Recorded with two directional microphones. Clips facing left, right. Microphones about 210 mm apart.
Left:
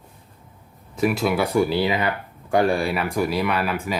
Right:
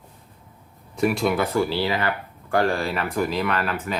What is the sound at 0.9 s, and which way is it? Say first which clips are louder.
Speech: left 1 dB; centre (ahead or behind).